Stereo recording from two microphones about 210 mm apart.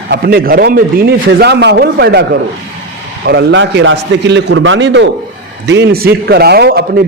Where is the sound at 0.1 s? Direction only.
45° right (ahead or behind).